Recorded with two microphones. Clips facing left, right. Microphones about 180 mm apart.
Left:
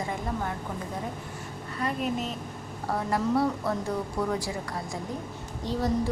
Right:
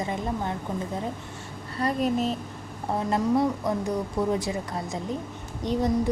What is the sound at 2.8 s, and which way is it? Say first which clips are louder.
A woman's voice: right 2 dB; 20° right (ahead or behind).